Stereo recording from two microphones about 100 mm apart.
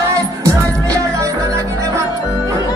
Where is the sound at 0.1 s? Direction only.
30° right (ahead or behind).